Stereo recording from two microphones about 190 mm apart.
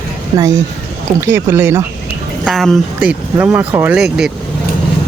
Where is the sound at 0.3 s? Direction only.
15° right (ahead or behind).